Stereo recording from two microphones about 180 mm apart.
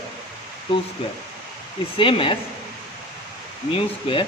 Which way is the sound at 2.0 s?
30° left (ahead or behind).